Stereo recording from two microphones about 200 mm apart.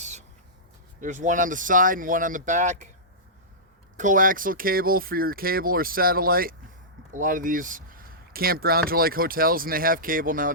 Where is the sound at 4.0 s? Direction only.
40° right (ahead or behind).